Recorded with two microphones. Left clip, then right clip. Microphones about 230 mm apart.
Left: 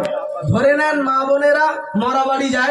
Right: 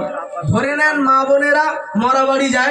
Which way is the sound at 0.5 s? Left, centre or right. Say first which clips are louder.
Left 1 dB; right.